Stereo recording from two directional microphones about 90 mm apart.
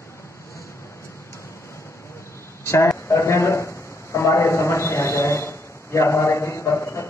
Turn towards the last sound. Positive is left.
turn(degrees=30)  # may be behind; listen again after turning